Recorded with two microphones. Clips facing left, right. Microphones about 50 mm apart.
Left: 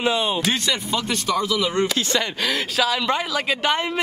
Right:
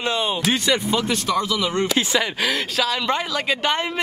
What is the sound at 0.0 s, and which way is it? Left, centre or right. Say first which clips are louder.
Speech: left 1 dB; centre.